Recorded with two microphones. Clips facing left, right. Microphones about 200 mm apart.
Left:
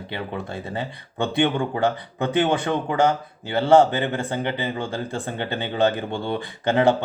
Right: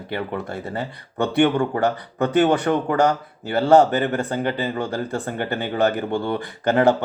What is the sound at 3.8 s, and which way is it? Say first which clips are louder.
Speech: right 2 dB; 25° left (ahead or behind).